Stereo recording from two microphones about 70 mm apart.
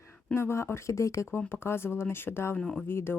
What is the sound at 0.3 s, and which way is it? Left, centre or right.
Speech, left.